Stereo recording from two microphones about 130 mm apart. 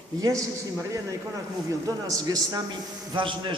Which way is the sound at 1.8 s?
25° right (ahead or behind).